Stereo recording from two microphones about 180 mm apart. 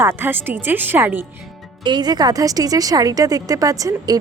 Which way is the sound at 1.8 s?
25° right (ahead or behind).